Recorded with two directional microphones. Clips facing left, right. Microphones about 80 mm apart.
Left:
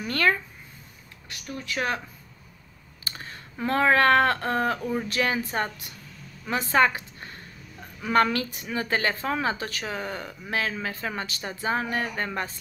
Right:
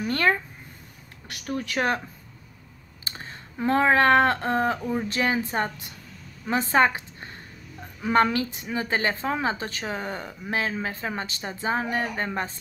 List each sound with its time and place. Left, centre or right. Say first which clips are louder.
0.0 s speech: right 1 dB; right
1.4 s speech: right 5 dB; right
3.0 s a sound: even; right
3.5 s speech: right 1 dB; centre
5.1 s a woman's voice: right 2 dB; right
10.1 s speech: right 1 dB; centre